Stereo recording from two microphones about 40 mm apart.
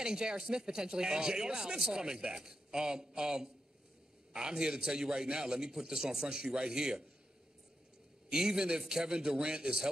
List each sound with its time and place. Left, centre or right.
0.0 s speech: centre
8.3 s speech: centre